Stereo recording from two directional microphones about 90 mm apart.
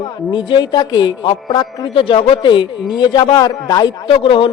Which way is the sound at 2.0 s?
90° left.